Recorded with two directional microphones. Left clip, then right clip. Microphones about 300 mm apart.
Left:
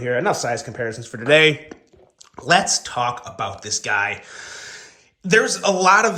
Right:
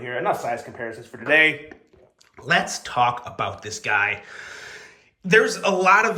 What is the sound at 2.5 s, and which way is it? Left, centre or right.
A man's voice, centre.